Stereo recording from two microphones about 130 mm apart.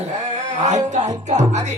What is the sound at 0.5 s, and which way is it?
Speech, 65° right (ahead or behind).